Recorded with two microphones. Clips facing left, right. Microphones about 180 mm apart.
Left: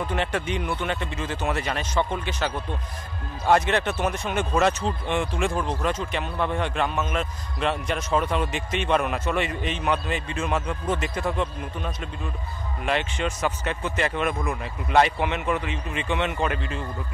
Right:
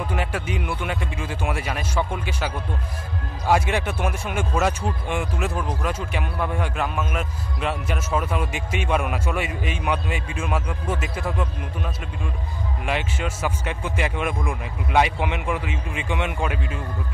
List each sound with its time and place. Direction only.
0.0 s speech: 10° right (ahead or behind)